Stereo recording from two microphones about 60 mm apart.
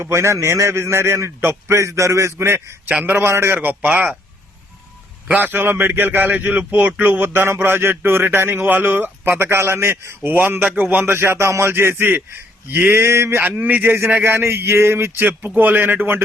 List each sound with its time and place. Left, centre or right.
0.0 s a man's voice: right
2.9 s speech: right
3.2 s a man's voice: right
3.6 s speech: right
5.4 s speech: right
10.2 s speech: right
11.0 s a man's voice: right
13.5 s speech: right
14.1 s speech: right